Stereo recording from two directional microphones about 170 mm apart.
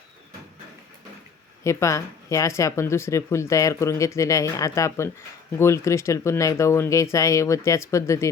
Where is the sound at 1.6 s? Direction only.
15° left (ahead or behind).